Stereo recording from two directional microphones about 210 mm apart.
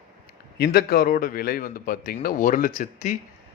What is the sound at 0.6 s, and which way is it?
A man's voice, 45° left (ahead or behind).